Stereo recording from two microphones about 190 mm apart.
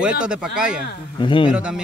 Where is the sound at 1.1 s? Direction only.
25° left (ahead or behind).